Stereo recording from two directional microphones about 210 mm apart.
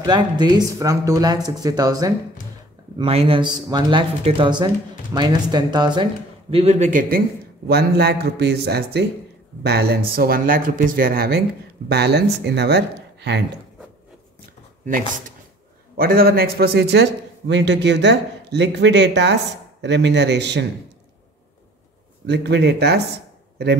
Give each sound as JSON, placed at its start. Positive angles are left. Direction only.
{"t": 0.0, "sound": "speech", "side_deg": -20}
{"t": 3.0, "sound": "speech", "side_deg": -25}
{"t": 6.5, "sound": "a man's voice", "side_deg": -30}
{"t": 16.0, "sound": "a man's voice", "side_deg": -45}
{"t": 22.2, "sound": "a man's voice", "side_deg": -55}